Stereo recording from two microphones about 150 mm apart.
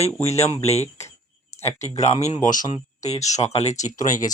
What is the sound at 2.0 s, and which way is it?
Speech, 50° left (ahead or behind).